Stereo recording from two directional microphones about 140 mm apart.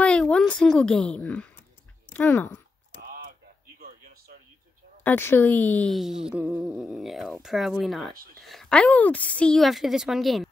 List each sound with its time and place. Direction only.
0.0 s a woman's voice: 5° left (ahead or behind)
3.0 s typing: 90° right
5.0 s speech: 15° left (ahead or behind)
5.9 s speech: 5° right (ahead or behind)